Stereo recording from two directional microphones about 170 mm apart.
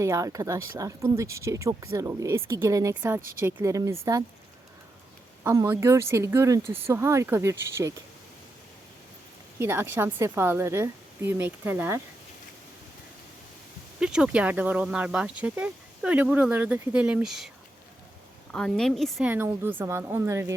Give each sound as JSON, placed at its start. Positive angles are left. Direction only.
{"t": 0.0, "sound": "speech", "side_deg": -20}
{"t": 5.4, "sound": "speech", "side_deg": -15}
{"t": 9.6, "sound": "speech", "side_deg": -15}
{"t": 14.0, "sound": "speech", "side_deg": -5}
{"t": 18.5, "sound": "a woman's voice", "side_deg": 5}
{"t": 19.3, "sound": "speech", "side_deg": -10}